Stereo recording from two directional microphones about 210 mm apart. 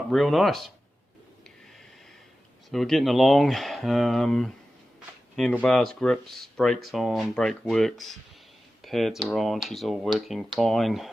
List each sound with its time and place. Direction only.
0.1 s speech: centre (ahead or behind)
2.6 s speech: centre (ahead or behind)
5.5 s speech: centre (ahead or behind)
8.8 s computer keyboard: centre (ahead or behind)
9.2 s speech: centre (ahead or behind)